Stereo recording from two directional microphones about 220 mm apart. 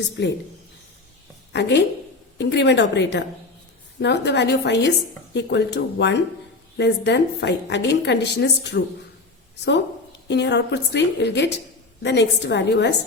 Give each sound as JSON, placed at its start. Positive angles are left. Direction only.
{"t": 1.5, "sound": "a woman's voice", "side_deg": 50}
{"t": 10.2, "sound": "a woman's voice", "side_deg": 50}